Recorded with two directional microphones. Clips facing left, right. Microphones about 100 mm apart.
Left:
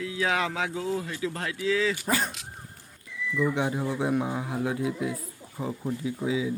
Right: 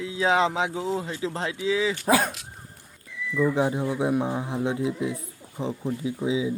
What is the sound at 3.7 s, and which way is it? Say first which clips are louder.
Speech: right 2 dB; 20° right (ahead or behind).